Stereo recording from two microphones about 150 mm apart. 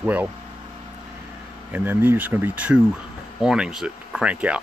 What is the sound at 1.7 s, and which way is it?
Speech, 15° right (ahead or behind).